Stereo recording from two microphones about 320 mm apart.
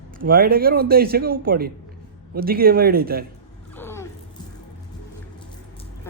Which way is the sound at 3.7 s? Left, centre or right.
Centre.